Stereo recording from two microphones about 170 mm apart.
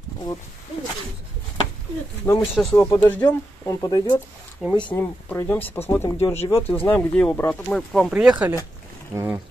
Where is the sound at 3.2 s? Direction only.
20° left (ahead or behind).